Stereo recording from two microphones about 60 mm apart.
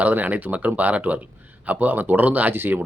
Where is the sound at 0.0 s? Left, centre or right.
Right.